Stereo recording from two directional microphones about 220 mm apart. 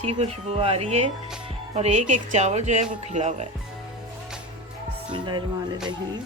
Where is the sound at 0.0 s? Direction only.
30° right (ahead or behind).